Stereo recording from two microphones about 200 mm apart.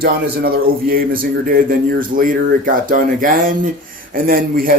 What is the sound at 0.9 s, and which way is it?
Speech, 45° right (ahead or behind).